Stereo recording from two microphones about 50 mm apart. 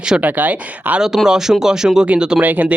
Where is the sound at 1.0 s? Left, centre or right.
Centre.